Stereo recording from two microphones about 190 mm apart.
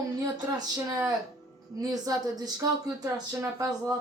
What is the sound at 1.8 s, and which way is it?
Speech, 20° right (ahead or behind).